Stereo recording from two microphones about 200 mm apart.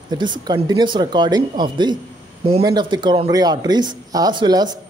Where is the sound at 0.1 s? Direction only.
20° right (ahead or behind).